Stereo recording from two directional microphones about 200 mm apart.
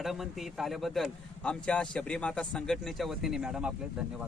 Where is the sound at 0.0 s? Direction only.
Centre (ahead or behind).